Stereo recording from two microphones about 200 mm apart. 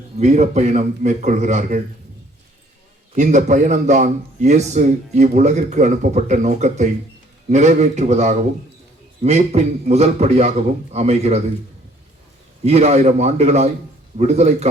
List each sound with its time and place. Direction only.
0.2 s a man's voice: 35° right (ahead or behind)
3.2 s a man's voice: 35° right (ahead or behind)
12.6 s a man's voice: 35° right (ahead or behind)